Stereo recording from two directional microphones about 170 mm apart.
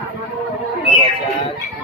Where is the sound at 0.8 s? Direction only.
35° left (ahead or behind).